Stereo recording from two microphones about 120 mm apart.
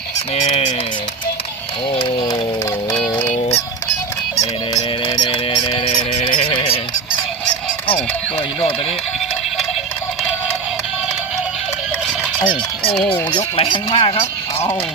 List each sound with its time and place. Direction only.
0.3 s honk: 75° left (ahead or behind)
1.9 s a sound: 45° left (ahead or behind)
3.2 s music: 75° left (ahead or behind)
4.4 s fowl: 30° left (ahead or behind)
6.5 s honk: 40° left (ahead or behind)
12.9 s speech: centre (ahead or behind)
13.6 s speech: 45° left (ahead or behind)